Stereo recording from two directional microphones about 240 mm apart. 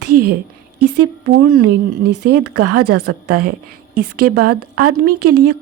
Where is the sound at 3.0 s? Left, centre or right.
Right.